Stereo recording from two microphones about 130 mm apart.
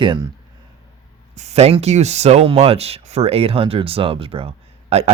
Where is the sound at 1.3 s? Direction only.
60° right (ahead or behind).